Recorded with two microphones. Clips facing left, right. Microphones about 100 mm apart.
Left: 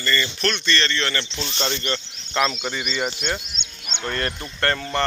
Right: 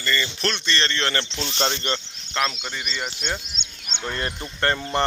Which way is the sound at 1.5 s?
55° right (ahead or behind).